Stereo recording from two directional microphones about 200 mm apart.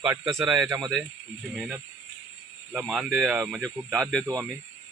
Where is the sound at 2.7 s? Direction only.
5° right (ahead or behind).